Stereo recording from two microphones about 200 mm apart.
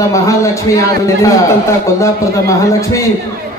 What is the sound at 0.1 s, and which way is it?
A man's voice, 15° left (ahead or behind).